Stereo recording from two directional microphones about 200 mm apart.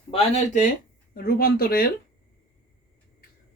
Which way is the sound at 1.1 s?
45° left (ahead or behind).